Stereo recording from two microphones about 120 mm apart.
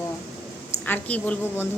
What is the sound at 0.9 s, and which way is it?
Speech, 15° left (ahead or behind).